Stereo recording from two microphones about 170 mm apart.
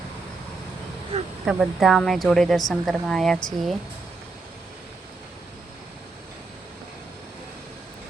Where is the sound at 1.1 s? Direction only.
35° right (ahead or behind).